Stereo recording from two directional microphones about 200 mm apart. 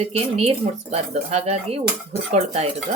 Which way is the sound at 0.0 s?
30° right (ahead or behind).